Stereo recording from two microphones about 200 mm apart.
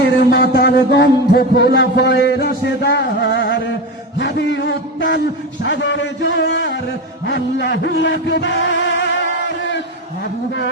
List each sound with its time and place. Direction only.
0.3 s a man's voice: 55° left (ahead or behind); by 9.0 s 70° left (ahead or behind)